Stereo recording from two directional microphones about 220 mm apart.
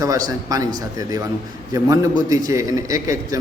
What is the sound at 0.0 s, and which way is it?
A man's voice, 15° right (ahead or behind).